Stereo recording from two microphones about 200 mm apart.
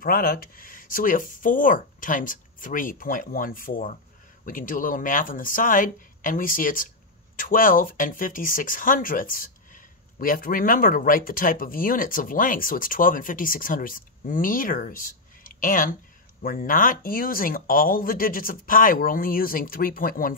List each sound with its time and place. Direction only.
0.0 s speech: 45° left (ahead or behind)